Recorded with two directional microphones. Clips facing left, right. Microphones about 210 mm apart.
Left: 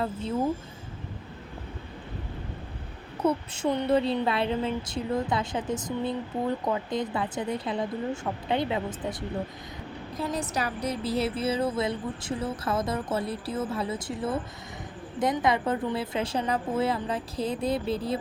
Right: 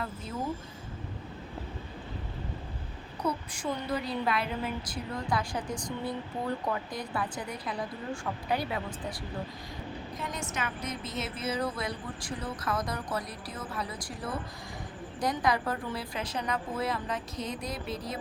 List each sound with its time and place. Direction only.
3.2 s speech: 25° left (ahead or behind)
10.2 s speech: 35° left (ahead or behind)